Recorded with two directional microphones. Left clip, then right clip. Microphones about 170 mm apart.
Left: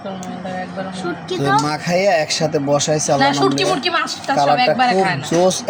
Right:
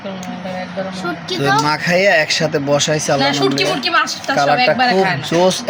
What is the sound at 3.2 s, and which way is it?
Speech, 15° right (ahead or behind).